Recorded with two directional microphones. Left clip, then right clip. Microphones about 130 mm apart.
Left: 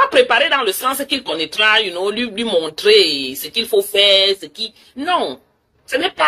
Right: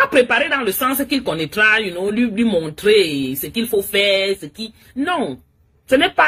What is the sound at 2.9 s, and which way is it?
Speech, 25° right (ahead or behind).